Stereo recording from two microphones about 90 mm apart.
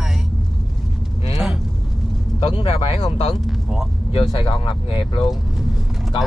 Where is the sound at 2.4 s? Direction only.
85° left.